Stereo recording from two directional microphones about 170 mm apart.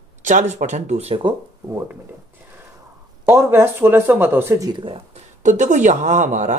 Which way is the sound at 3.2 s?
15° right (ahead or behind).